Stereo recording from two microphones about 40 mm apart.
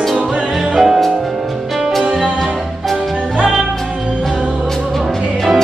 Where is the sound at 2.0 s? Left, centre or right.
Right.